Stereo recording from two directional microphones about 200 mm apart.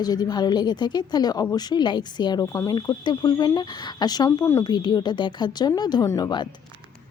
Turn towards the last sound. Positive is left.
turn(degrees=20)  # may be behind; listen again after turning